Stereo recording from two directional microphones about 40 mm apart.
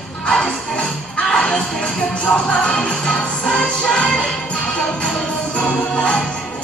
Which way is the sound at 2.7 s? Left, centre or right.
Centre.